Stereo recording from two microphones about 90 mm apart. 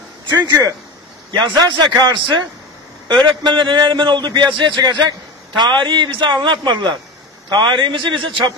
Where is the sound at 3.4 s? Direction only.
65° right (ahead or behind).